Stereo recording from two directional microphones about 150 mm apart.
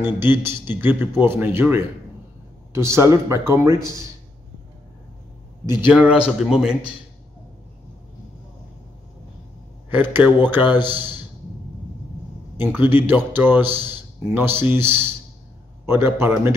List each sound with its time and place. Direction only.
0.0 s speech: 15° right (ahead or behind)
5.7 s speech: 10° right (ahead or behind)
10.0 s speech: 10° right (ahead or behind)
12.5 s a man's voice: 15° right (ahead or behind)